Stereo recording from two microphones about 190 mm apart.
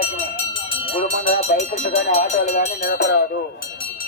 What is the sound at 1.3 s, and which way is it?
Speech, 40° left (ahead or behind).